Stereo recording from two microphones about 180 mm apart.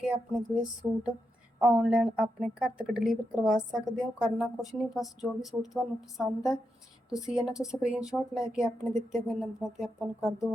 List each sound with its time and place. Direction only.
0.0 s speech: 5° right (ahead or behind)
10.2 s speech: 15° left (ahead or behind)